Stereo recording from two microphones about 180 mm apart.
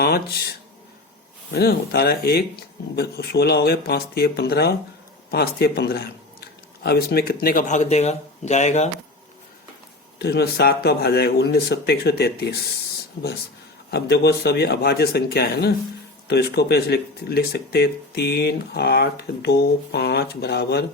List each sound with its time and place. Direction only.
0.0 s speech: 60° left (ahead or behind)
1.5 s speech: 60° left (ahead or behind); by 8.9 s 40° left (ahead or behind)
10.2 s speech: 65° left (ahead or behind)
13.9 s speech: 65° left (ahead or behind)